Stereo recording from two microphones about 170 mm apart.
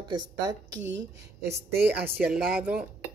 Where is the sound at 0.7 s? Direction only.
90° right.